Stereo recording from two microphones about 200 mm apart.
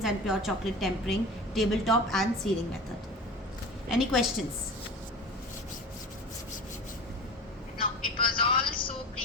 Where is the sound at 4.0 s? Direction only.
5° right (ahead or behind).